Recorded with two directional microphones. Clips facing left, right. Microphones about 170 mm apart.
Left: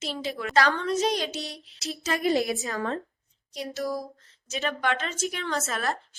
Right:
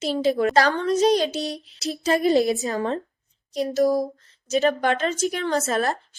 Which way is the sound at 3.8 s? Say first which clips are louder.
Right 11 dB; 40° right (ahead or behind).